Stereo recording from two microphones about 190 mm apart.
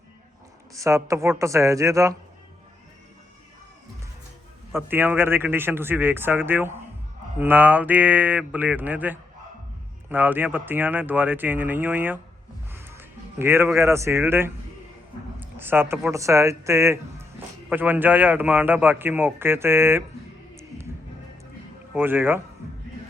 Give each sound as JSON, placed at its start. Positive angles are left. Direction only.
{"t": 0.7, "sound": "a man's voice", "side_deg": -15}
{"t": 4.7, "sound": "a man's voice", "side_deg": -10}
{"t": 20.6, "sound": "music", "side_deg": -15}
{"t": 21.9, "sound": "a man's voice", "side_deg": -10}